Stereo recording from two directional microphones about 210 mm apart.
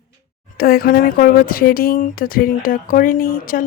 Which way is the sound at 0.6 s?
45° left (ahead or behind).